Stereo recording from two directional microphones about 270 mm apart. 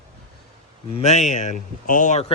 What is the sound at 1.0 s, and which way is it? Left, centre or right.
Speech, left.